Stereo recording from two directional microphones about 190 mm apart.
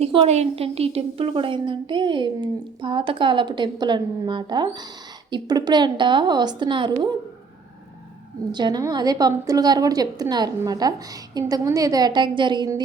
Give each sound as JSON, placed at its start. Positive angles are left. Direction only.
{"t": 0.0, "sound": "a woman's voice", "side_deg": -30}
{"t": 8.5, "sound": "a woman's voice", "side_deg": -20}